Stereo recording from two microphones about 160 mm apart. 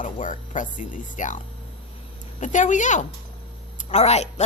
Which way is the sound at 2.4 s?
50° left (ahead or behind).